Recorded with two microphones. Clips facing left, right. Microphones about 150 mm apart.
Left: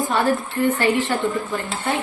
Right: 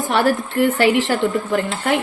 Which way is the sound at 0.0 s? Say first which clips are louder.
Right 2 dB; 85° right.